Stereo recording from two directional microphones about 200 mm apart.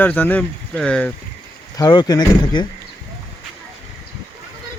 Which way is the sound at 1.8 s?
20° left (ahead or behind).